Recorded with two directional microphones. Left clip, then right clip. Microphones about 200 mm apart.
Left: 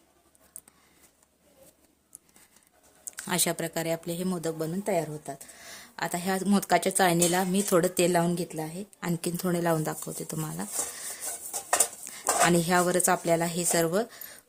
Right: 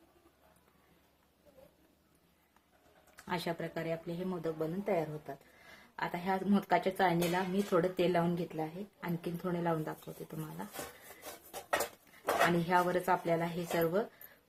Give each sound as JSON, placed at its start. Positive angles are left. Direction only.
{"t": 3.2, "sound": "speech", "side_deg": 60}
{"t": 12.5, "sound": "speech", "side_deg": 65}